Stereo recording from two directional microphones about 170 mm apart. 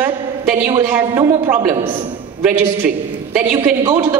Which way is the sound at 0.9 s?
10° right (ahead or behind).